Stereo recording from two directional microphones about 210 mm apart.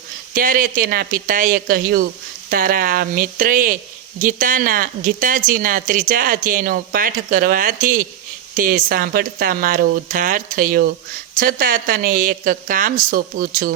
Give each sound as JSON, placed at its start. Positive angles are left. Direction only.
{"t": 0.3, "sound": "speech", "side_deg": -40}